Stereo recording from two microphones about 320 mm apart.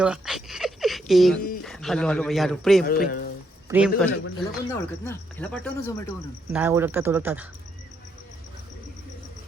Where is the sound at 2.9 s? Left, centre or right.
Left.